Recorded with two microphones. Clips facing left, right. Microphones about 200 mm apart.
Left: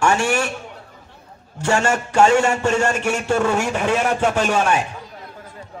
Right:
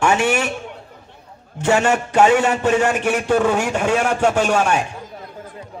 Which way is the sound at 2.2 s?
5° right (ahead or behind).